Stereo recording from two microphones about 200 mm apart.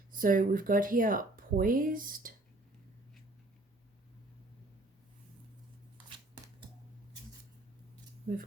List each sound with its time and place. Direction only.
0.1 s speech: 45° right (ahead or behind)